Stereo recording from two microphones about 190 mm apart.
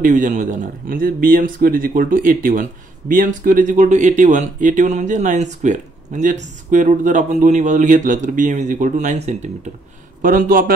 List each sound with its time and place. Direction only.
0.0 s speech: 45° right (ahead or behind)